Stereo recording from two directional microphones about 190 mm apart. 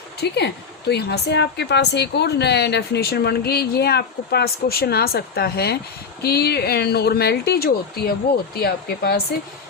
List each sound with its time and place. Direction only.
0.2 s speech: 60° left (ahead or behind)